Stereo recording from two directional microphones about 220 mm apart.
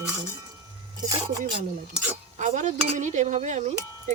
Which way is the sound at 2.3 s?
35° right (ahead or behind).